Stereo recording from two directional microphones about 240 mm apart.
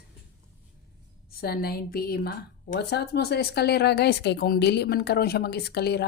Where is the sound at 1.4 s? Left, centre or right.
Left.